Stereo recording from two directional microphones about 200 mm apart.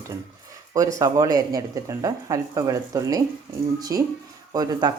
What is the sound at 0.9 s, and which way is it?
A woman's voice, 15° right (ahead or behind).